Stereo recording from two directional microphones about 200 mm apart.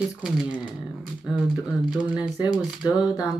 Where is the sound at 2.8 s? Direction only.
20° left (ahead or behind).